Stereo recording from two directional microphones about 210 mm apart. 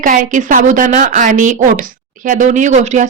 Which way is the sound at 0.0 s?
40° right (ahead or behind).